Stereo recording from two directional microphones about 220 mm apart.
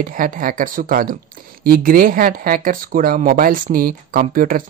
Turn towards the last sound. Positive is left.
turn(degrees=-40)  # may be behind; listen again after turning